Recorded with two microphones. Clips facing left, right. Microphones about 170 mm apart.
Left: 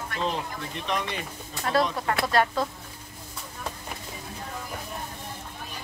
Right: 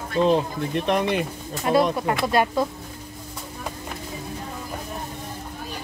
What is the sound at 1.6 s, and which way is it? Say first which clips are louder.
Speech: right 5 dB; 15° right (ahead or behind).